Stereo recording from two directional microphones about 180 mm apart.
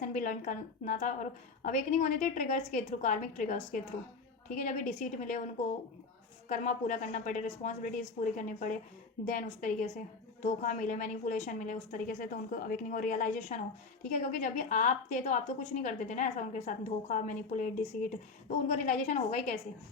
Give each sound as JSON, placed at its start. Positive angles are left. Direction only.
{"t": 0.0, "sound": "a woman's voice", "side_deg": 45}
{"t": 6.5, "sound": "a woman's voice", "side_deg": 45}